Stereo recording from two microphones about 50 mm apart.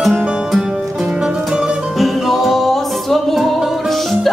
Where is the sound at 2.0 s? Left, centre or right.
Centre.